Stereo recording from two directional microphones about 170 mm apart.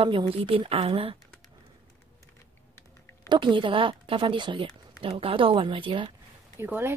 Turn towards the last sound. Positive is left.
turn(degrees=-15)  # may be behind; listen again after turning